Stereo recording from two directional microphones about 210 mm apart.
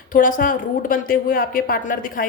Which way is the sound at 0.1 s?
40° left (ahead or behind).